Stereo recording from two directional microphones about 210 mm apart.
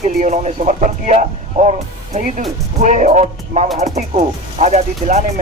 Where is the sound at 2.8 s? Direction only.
35° right (ahead or behind).